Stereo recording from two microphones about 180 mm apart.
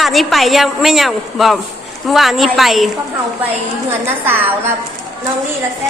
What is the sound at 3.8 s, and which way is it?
Speech, 15° right (ahead or behind).